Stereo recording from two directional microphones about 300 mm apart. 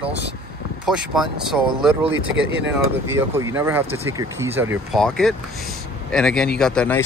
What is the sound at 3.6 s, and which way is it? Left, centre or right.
Speech, centre.